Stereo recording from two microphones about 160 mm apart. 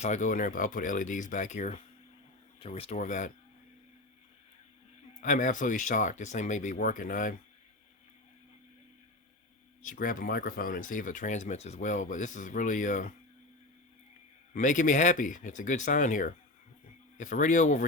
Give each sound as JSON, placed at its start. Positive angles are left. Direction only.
{"t": 0.0, "sound": "speech", "side_deg": 50}
{"t": 3.0, "sound": "speech", "side_deg": 50}
{"t": 5.2, "sound": "speech", "side_deg": 50}
{"t": 9.8, "sound": "speech", "side_deg": 55}
{"t": 14.5, "sound": "speech", "side_deg": 50}